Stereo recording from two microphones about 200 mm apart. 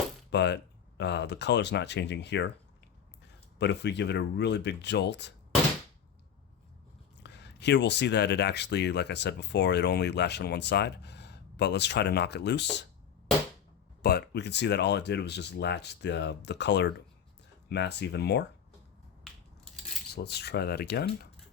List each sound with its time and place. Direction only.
0.3 s speech: 60° left (ahead or behind)
3.6 s speech: 60° left (ahead or behind)
7.2 s speech: 60° left (ahead or behind)
14.0 s speech: 55° left (ahead or behind)
20.1 s speech: 55° left (ahead or behind)